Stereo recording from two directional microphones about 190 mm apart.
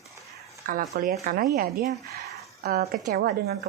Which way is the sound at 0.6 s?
45° right (ahead or behind).